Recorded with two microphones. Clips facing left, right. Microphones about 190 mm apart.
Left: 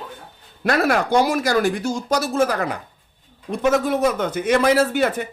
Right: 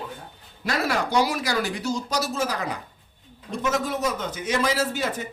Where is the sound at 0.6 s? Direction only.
55° left (ahead or behind).